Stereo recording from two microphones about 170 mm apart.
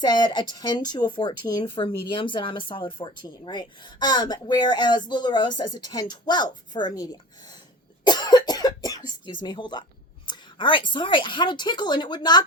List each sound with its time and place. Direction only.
0.0 s speech: 25° left (ahead or behind)
8.0 s cough: 25° left (ahead or behind)
9.2 s speech: 25° left (ahead or behind)